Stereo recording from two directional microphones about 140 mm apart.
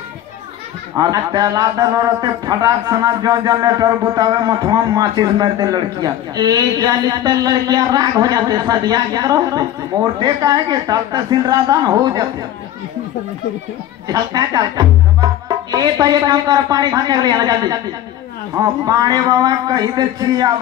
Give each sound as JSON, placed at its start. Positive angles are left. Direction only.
{"t": 0.9, "sound": "a man's voice", "side_deg": -25}
{"t": 14.0, "sound": "a man's voice", "side_deg": -30}